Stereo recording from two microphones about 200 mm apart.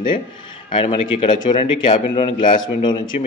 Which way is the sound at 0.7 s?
25° left (ahead or behind).